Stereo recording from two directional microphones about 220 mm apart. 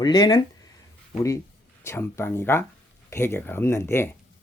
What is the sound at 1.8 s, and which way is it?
Speech, 10° left (ahead or behind).